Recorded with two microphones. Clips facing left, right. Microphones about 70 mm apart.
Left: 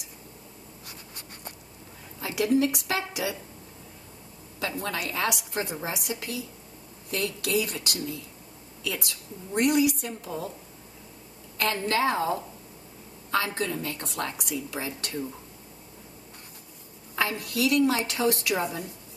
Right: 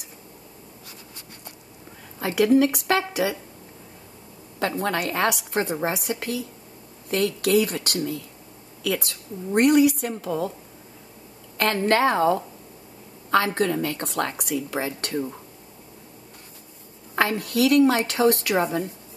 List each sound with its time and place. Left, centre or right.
2.1 s a woman's voice: right
4.6 s a woman's voice: right
11.5 s a woman's voice: right
13.6 s a woman's voice: right
17.1 s a woman's voice: right